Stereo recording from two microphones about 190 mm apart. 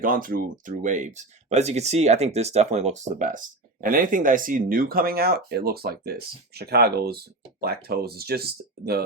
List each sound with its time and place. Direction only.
0.0 s speech: 45° right (ahead or behind)